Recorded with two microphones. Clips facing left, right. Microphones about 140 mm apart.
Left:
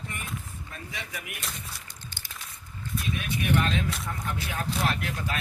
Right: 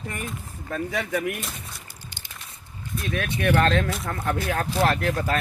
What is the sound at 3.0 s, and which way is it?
Speech, 65° right (ahead or behind).